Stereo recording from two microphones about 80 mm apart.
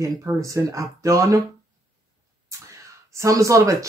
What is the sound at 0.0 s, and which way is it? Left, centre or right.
Speech, right.